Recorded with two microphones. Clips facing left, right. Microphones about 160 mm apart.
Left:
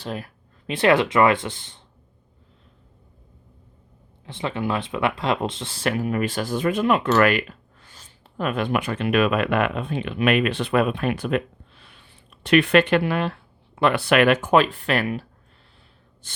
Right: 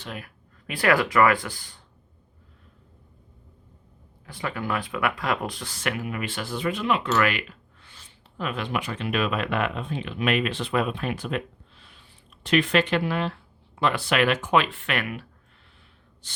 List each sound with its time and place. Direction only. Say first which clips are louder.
0.0 s speech: left 6 dB; 35° left (ahead or behind)
4.3 s speech: left 4 dB; 25° left (ahead or behind)